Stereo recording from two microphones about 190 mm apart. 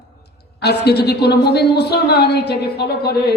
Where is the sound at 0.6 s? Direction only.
60° left (ahead or behind).